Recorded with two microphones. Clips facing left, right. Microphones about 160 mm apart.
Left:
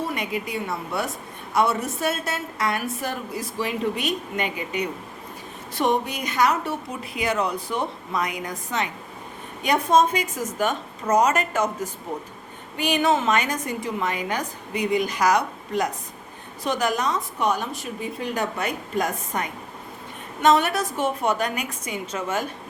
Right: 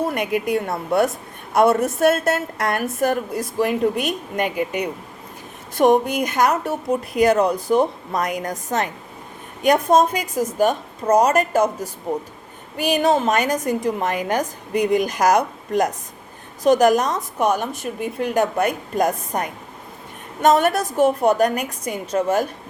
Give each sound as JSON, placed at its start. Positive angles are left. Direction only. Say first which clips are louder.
{"t": 0.1, "sound": "a woman's voice", "louder": "right 7 dB", "side_deg": -55}